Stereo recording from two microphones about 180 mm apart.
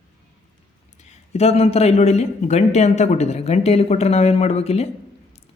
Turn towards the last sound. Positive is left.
turn(degrees=35)  # may be behind; listen again after turning